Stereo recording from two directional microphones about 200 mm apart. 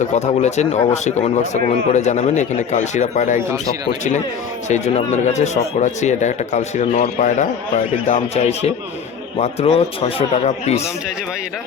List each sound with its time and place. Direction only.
0.0 s speech: 35° left (ahead or behind)
4.7 s speech: 35° left (ahead or behind)